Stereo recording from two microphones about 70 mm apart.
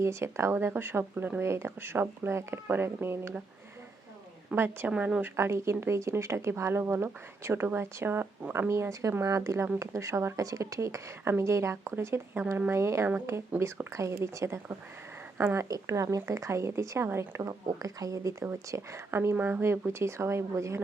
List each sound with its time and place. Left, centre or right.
0.0 s speech: right
4.5 s speech: right
4.9 s a woman's voice: centre
5.4 s speech: right
8.7 s a woman's voice: right
12.8 s speech: right
17.5 s speech: right
19.4 s a woman's voice: right
19.9 s speech: right